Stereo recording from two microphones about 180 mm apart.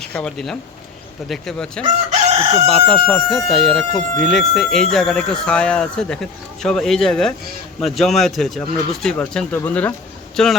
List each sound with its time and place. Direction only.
0.0 s speech: 5° left (ahead or behind)
2.3 s chicken: 35° right (ahead or behind)
2.6 s speech: 5° left (ahead or behind)